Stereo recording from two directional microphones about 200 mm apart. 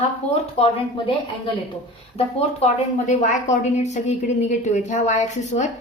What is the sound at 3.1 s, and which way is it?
A woman's voice, 35° left (ahead or behind).